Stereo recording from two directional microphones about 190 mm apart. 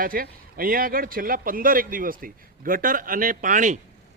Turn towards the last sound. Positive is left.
turn(degrees=-45)  # may be behind; listen again after turning